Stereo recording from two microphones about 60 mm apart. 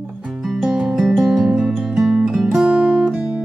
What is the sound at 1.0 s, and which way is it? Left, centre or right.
Music, centre.